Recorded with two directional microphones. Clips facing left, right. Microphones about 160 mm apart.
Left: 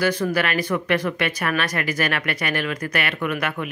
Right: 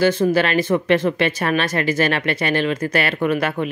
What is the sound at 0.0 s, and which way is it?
Speech, 25° right (ahead or behind).